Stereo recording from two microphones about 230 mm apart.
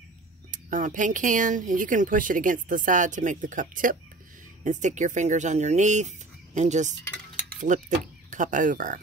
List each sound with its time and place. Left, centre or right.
0.5 s speech: right